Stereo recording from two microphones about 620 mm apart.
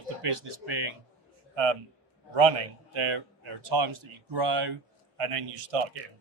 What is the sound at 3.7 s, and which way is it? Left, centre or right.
Speech, right.